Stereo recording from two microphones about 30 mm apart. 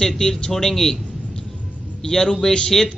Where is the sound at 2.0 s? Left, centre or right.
Centre.